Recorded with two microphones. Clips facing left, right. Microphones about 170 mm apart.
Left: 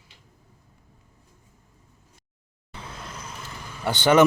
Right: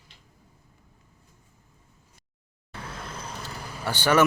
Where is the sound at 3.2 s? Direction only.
35° right (ahead or behind).